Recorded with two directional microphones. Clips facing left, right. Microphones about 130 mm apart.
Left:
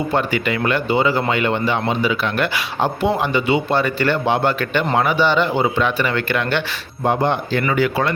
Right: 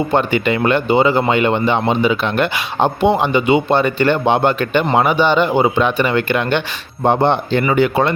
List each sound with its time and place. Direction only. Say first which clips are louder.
0.1 s speech: right 4 dB; 25° right (ahead or behind)